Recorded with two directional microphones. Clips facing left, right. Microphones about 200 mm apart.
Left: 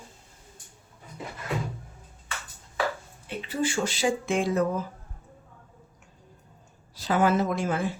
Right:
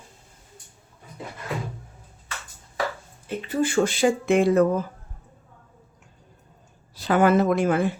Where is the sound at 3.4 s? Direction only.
55° right (ahead or behind).